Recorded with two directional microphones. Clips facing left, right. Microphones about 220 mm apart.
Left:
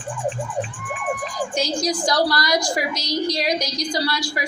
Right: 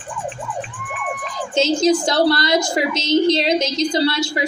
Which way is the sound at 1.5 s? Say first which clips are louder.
Right 9 dB; 25° right (ahead or behind).